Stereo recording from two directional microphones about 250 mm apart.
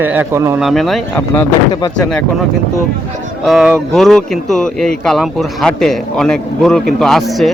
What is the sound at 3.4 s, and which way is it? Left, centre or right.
Speech, centre.